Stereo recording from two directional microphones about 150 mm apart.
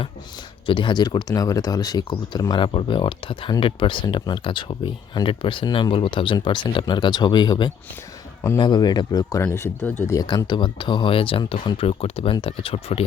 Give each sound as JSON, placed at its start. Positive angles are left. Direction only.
{"t": 0.7, "sound": "speech", "side_deg": 35}
{"t": 9.4, "sound": "speech", "side_deg": 15}